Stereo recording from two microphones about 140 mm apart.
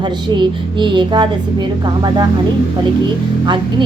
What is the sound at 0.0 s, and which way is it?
A woman's voice, 30° right (ahead or behind).